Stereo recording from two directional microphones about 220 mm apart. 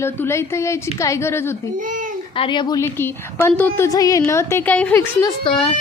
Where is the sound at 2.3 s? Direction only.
20° left (ahead or behind).